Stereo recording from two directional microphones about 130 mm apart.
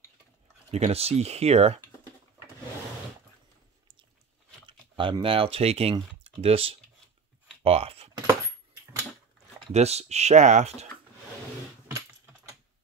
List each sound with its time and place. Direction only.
0.7 s speech: 55° right (ahead or behind)
4.6 s a sound: 40° right (ahead or behind)
5.2 s speech: 45° right (ahead or behind)
9.7 s speech: 55° right (ahead or behind)